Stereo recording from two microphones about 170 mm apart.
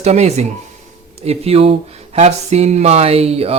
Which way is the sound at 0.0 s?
40° right (ahead or behind).